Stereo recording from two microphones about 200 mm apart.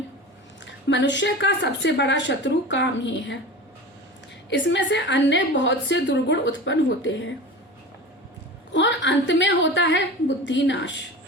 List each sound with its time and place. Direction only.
0.9 s a woman's voice: 60° left (ahead or behind)
4.4 s a woman's voice: 60° left (ahead or behind)
8.7 s a woman's voice: 60° left (ahead or behind)